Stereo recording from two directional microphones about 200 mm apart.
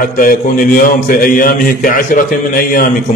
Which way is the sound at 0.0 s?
45° left (ahead or behind).